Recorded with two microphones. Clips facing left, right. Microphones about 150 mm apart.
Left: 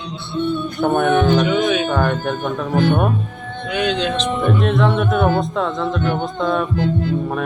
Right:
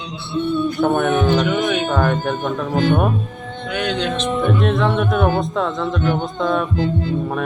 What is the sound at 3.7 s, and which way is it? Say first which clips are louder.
Speech: left 2 dB; centre (ahead or behind).